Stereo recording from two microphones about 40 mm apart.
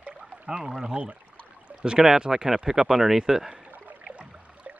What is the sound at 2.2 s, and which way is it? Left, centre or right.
Speech, centre.